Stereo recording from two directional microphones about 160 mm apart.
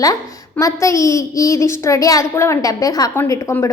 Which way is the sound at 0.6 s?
20° left (ahead or behind).